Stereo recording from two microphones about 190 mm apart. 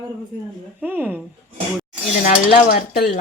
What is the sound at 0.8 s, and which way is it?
Speech, 10° right (ahead or behind).